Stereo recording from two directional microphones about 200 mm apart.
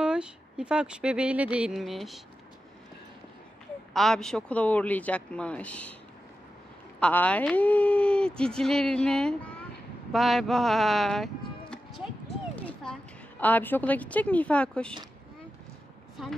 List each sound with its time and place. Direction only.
0.0 s speech: 5° right (ahead or behind)
3.9 s speech: centre (ahead or behind)
7.0 s speech: 5° left (ahead or behind)
11.7 s music: centre (ahead or behind)
12.6 s a woman's voice: 5° left (ahead or behind)